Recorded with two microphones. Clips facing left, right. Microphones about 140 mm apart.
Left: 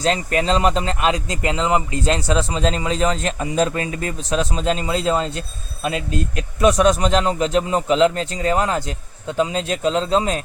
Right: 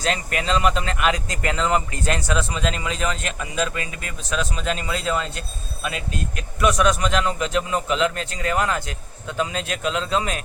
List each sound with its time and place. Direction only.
0.0 s a man's voice: 30° left (ahead or behind)